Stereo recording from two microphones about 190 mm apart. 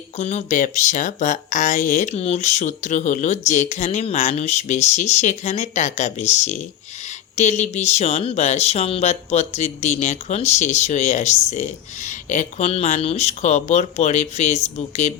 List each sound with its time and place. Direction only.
0.2 s speech: 35° left (ahead or behind)